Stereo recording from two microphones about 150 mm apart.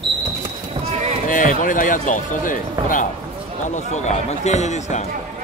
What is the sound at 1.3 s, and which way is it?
Speech, 60° left (ahead or behind).